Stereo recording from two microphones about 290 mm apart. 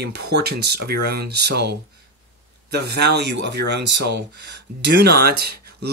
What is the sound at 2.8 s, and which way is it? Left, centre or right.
Speech, right.